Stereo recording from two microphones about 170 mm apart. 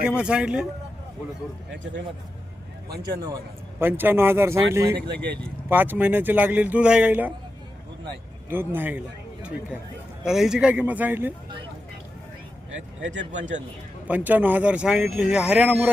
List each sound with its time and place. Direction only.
0.0 s a man's voice: 5° right (ahead or behind)
3.0 s speech: 20° right (ahead or behind)
8.4 s a man's voice: 10° right (ahead or behind)
13.1 s speech: 45° right (ahead or behind)
14.1 s speech: 10° right (ahead or behind)